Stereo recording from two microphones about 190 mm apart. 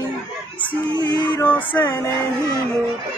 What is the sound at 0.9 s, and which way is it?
Music, 25° left (ahead or behind).